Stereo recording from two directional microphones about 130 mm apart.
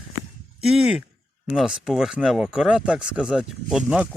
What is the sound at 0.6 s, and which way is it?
Speech, 5° right (ahead or behind).